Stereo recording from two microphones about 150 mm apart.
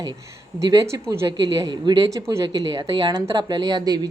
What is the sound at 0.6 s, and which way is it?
A woman's voice, 25° right (ahead or behind).